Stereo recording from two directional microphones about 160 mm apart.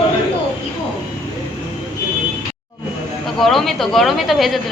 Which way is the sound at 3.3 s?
Centre (ahead or behind).